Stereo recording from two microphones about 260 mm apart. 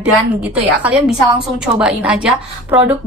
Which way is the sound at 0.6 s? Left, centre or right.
Centre.